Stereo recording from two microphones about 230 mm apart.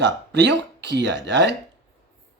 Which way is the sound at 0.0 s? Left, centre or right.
Right.